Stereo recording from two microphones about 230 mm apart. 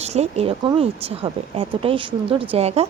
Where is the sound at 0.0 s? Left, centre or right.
Right.